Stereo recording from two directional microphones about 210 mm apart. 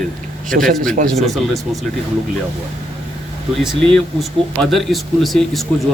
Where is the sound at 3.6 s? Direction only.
Centre (ahead or behind).